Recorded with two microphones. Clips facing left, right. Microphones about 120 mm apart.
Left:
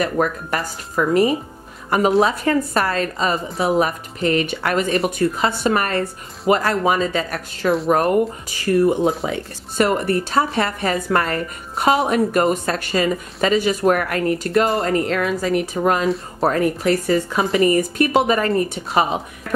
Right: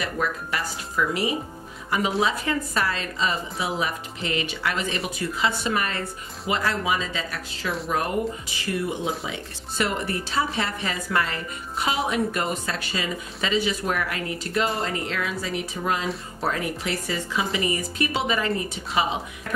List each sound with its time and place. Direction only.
0.0 s a woman's voice: 45° left (ahead or behind)